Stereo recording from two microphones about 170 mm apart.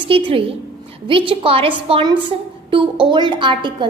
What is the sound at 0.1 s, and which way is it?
A woman's voice, 30° right (ahead or behind).